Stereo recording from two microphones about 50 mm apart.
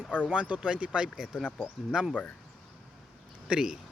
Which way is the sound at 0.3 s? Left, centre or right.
Right.